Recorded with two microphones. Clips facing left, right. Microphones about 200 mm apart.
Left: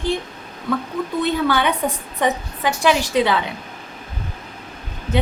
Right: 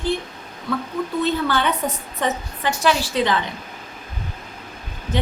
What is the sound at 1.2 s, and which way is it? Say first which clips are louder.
A woman's voice: left 3 dB; 15° left (ahead or behind).